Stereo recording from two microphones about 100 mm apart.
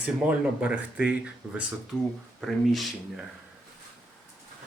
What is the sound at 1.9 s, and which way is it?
Speech, centre (ahead or behind).